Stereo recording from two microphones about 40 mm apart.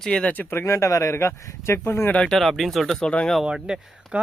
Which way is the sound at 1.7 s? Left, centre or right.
Left.